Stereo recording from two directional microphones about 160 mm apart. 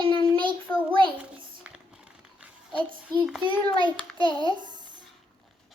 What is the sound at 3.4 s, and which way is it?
Child singing, 30° right (ahead or behind).